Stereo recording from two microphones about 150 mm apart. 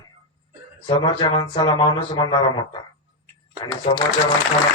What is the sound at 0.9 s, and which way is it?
Speech, 25° left (ahead or behind).